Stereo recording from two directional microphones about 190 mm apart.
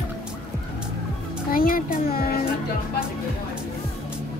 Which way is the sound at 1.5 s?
50° left (ahead or behind).